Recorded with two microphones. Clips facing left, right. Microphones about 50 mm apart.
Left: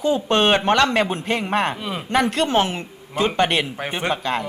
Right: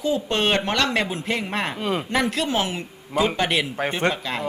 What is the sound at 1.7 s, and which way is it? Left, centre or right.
Speech, centre.